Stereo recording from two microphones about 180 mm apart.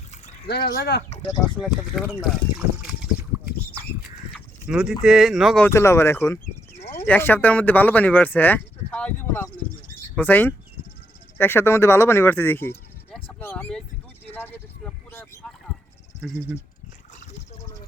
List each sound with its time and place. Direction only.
0.4 s speech: 60° left (ahead or behind)
1.6 s speech: centre (ahead or behind)
2.8 s boat: 5° right (ahead or behind)
4.7 s speech: 5° right (ahead or behind)
5.6 s speech: 15° left (ahead or behind)
13.6 s a sound: 5° left (ahead or behind)
15.4 s a sound: centre (ahead or behind)